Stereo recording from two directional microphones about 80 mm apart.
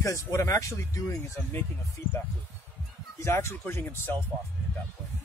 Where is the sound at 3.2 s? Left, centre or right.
Left.